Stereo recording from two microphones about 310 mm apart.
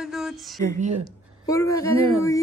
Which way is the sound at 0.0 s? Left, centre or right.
Centre.